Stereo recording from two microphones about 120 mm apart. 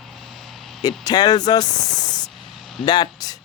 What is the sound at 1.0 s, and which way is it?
Speech, 35° left (ahead or behind).